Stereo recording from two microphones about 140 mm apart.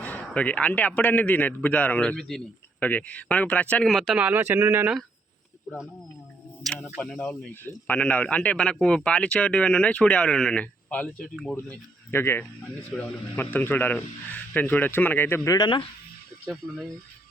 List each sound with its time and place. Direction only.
0.0 s a man's voice: 10° left (ahead or behind); by 4.9 s 15° right (ahead or behind)
6.9 s a man's voice: 5° left (ahead or behind)
11.5 s a man's voice: 15° left (ahead or behind)
15.5 s speech: 35° left (ahead or behind)